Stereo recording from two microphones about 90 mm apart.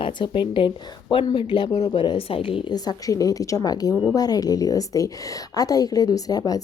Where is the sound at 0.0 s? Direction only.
60° left (ahead or behind).